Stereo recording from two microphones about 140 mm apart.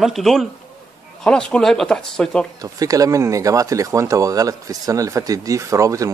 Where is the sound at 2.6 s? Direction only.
25° right (ahead or behind).